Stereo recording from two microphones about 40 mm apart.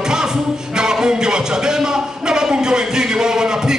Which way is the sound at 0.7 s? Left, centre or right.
Centre.